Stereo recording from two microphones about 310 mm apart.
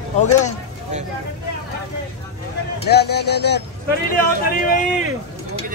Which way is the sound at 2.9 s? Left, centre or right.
Left.